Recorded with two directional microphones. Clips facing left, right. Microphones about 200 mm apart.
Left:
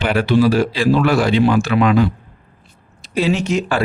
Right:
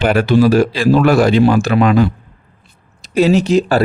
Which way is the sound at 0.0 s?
45° right (ahead or behind).